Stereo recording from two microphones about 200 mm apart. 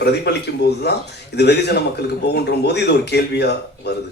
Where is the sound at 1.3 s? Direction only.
55° left (ahead or behind).